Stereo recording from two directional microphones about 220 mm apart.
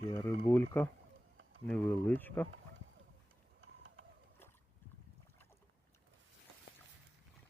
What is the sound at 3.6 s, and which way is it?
Pigeon, 60° right (ahead or behind).